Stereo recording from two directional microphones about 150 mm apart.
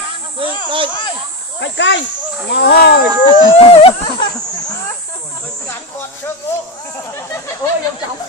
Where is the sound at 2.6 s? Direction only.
90° left.